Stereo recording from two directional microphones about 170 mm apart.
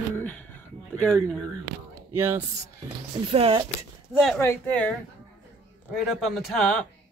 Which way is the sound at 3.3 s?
30° right (ahead or behind).